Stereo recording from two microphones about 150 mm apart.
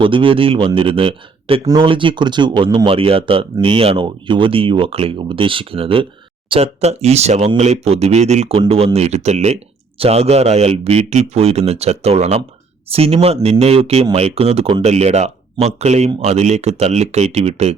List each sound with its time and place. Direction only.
0.0 s speech: 35° right (ahead or behind)